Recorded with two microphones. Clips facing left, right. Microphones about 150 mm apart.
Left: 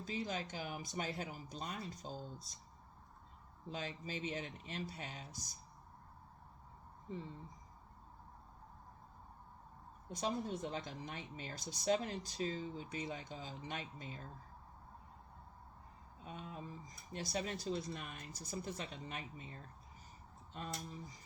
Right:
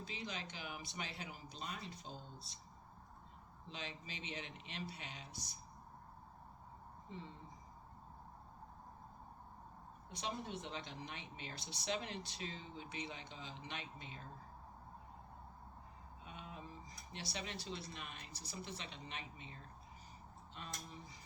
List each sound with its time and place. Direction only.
0.0 s speech: 45° left (ahead or behind)
3.7 s speech: 45° left (ahead or behind)
10.1 s speech: 45° left (ahead or behind)
16.2 s speech: 40° left (ahead or behind)